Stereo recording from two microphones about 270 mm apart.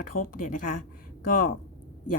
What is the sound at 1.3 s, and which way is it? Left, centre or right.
Speech, left.